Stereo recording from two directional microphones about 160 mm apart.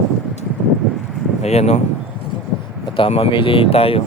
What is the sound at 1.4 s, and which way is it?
Speech, 40° left (ahead or behind).